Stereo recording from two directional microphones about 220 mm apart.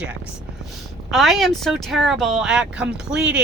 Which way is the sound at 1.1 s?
Centre (ahead or behind).